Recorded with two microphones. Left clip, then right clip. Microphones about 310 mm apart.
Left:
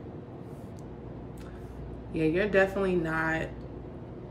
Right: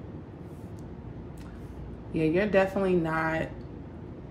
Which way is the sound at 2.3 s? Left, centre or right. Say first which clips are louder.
Even; centre.